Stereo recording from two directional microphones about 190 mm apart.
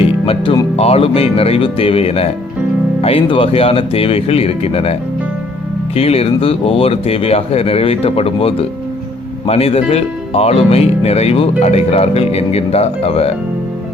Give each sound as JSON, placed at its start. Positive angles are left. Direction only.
{"t": 0.0, "sound": "music", "side_deg": 30}
{"t": 3.0, "sound": "speech", "side_deg": 30}